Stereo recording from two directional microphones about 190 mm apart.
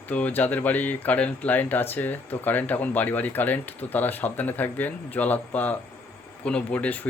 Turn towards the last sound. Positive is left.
turn(degrees=10)  # may be behind; listen again after turning